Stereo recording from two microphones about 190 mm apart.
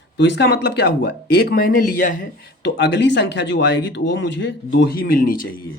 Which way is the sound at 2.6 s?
65° left (ahead or behind).